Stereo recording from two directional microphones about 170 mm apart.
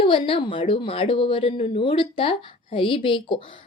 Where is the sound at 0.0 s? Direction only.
35° left (ahead or behind).